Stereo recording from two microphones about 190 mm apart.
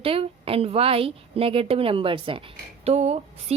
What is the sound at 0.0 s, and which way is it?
A woman's voice, 30° right (ahead or behind).